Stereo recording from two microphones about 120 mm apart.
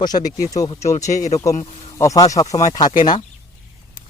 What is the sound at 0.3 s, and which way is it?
Speech, 90° left.